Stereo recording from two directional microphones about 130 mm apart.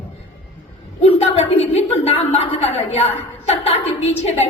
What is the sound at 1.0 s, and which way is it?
Chuckle, 50° left (ahead or behind).